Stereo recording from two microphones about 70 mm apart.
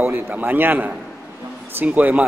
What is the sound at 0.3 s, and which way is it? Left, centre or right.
A man's voice, right.